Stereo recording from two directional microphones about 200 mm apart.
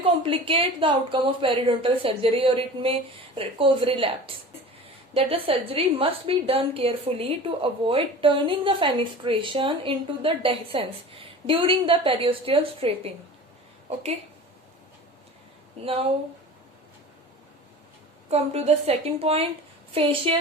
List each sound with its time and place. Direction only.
0.2 s a woman's voice: 25° right (ahead or behind)
15.8 s a woman's voice: 30° right (ahead or behind)
18.3 s a woman's voice: 30° right (ahead or behind)